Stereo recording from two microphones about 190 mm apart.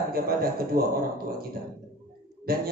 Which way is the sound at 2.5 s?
50° right (ahead or behind).